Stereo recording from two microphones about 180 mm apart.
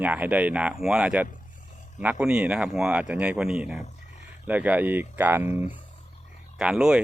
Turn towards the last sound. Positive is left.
turn(degrees=-5)  # may be behind; listen again after turning